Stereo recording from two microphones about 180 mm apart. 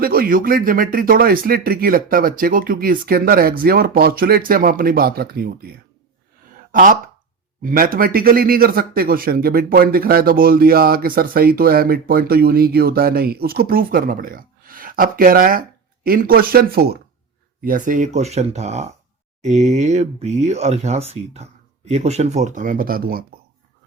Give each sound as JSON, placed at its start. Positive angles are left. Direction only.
{"t": 0.0, "sound": "speech", "side_deg": -55}